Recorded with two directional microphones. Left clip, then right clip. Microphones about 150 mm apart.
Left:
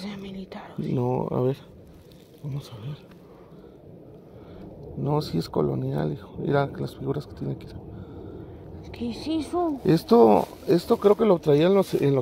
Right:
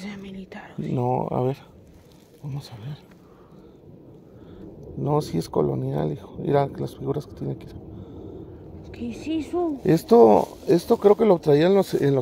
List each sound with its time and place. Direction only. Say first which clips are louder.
0.0 s whispering: left 1 dB; 10° left (ahead or behind)
0.9 s speech: right 2 dB; 15° right (ahead or behind)
5.0 s speech: right 3 dB; 20° right (ahead or behind)
8.8 s a woman's voice: even; 30° left (ahead or behind)
9.8 s speech: right 3 dB; 20° right (ahead or behind)